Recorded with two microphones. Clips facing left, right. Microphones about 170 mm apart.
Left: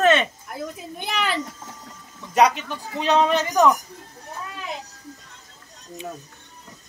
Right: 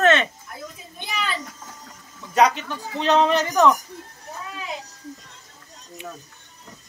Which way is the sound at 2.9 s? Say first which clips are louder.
Right 1 dB; 5° left (ahead or behind).